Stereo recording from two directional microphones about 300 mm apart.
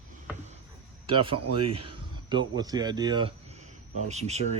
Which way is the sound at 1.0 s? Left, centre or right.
Centre.